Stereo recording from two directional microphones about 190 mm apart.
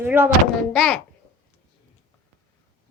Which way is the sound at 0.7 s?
5° left (ahead or behind).